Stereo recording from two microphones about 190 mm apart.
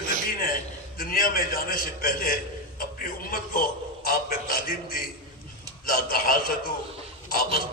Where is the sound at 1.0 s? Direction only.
50° left (ahead or behind).